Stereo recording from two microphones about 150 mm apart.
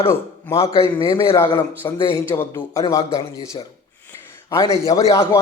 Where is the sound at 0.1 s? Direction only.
20° left (ahead or behind).